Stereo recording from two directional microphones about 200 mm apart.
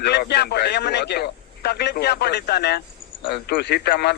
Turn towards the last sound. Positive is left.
turn(degrees=50)  # may be behind; listen again after turning